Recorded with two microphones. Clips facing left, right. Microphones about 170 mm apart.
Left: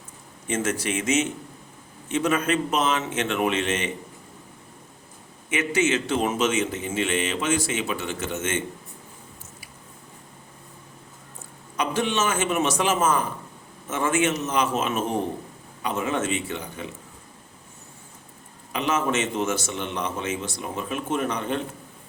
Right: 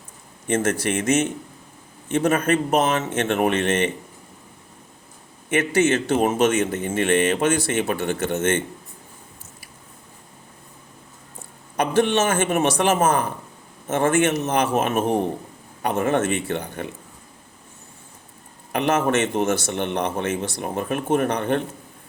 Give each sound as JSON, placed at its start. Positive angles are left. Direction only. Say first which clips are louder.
{"t": 0.4, "sound": "a man's voice", "louder": "right 4 dB", "side_deg": -55}
{"t": 5.5, "sound": "a man's voice", "louder": "right 4 dB", "side_deg": -60}
{"t": 11.8, "sound": "a man's voice", "louder": "right 5 dB", "side_deg": -60}
{"t": 18.7, "sound": "a man's voice", "louder": "right 4 dB", "side_deg": -60}